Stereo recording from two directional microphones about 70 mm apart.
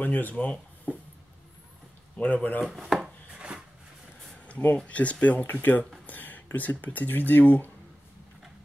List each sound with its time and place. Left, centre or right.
0.0 s speech: left
2.1 s speech: left
2.6 s chopping: centre
3.3 s a sound: centre
4.5 s a sound: left
4.7 s speech: centre